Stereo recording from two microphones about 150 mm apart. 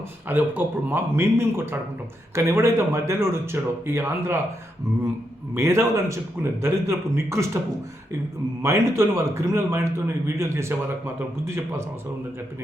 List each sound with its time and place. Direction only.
0.3 s a man's voice: 10° right (ahead or behind)
5.5 s a man's voice: 20° right (ahead or behind)
8.6 s a man's voice: 20° right (ahead or behind)